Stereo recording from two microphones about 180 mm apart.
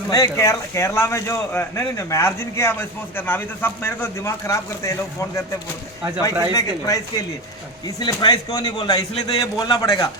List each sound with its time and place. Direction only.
0.1 s a man's voice: 15° left (ahead or behind)
6.5 s speech: 20° left (ahead or behind)